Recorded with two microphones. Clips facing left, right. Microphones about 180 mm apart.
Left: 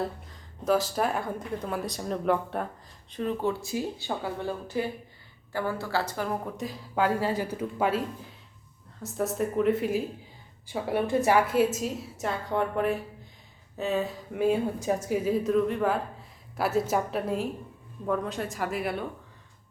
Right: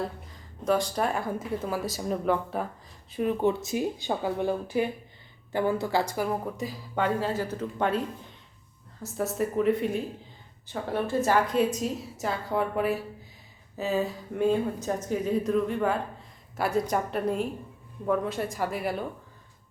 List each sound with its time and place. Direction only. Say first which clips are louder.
0.3 s speech: even; centre (ahead or behind)
3.1 s speech: right 3 dB; 10° right (ahead or behind)